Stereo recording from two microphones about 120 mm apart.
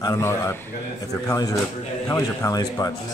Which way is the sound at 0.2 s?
20° left (ahead or behind).